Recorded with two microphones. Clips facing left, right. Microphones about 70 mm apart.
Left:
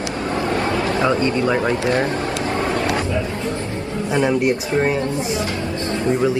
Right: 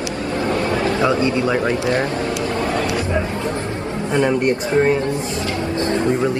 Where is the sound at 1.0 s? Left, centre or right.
Left.